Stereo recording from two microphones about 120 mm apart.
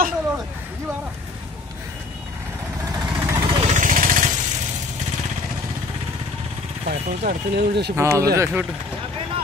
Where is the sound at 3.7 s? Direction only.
90° right.